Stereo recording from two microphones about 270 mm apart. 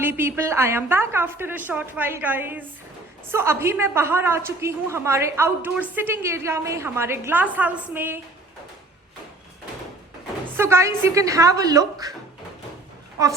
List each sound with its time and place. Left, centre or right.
0.0 s a woman's voice: centre
10.6 s a woman's voice: centre